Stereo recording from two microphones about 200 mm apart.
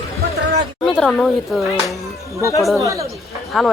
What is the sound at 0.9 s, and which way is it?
Speech, centre (ahead or behind).